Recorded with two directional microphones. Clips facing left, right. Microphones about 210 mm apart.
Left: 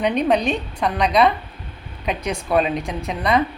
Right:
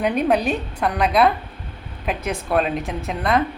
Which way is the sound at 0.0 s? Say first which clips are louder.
Even; 5° right (ahead or behind).